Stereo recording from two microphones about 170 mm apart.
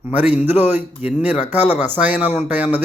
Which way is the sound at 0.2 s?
10° right (ahead or behind).